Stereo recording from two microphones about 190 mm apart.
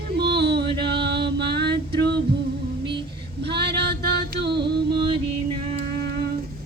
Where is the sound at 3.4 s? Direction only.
60° right (ahead or behind).